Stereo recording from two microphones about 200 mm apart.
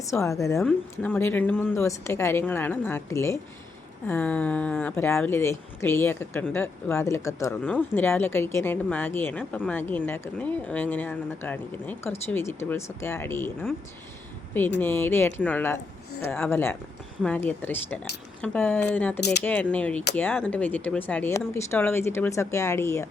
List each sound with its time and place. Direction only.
0.0 s speech: 15° left (ahead or behind)
14.8 s speech: 10° left (ahead or behind)